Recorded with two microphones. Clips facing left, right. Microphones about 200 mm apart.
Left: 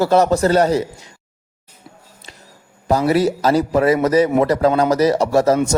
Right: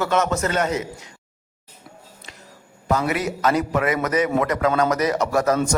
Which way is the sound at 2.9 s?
35° left (ahead or behind).